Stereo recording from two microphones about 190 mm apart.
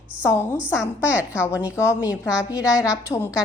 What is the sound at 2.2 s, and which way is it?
Speech, 5° right (ahead or behind).